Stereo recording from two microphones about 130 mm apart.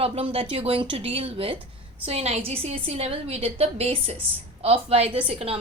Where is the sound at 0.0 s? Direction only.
50° right (ahead or behind).